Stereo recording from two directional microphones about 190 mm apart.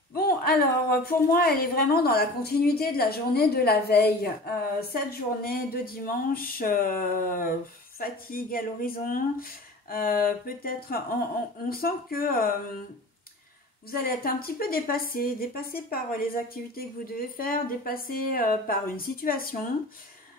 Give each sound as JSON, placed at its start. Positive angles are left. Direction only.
{"t": 0.1, "sound": "a woman's voice", "side_deg": 55}
{"t": 13.8, "sound": "speech", "side_deg": 50}
{"t": 17.4, "sound": "speech", "side_deg": 50}